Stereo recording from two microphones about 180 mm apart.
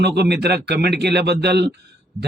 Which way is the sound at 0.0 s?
65° right (ahead or behind).